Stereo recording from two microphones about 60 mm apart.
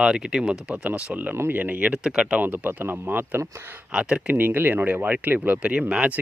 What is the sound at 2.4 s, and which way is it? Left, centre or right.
Speech, right.